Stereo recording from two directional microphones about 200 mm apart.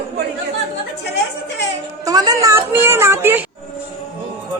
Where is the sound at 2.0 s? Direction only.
15° right (ahead or behind).